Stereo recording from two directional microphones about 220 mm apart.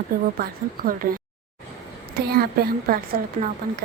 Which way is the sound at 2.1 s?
45° right (ahead or behind).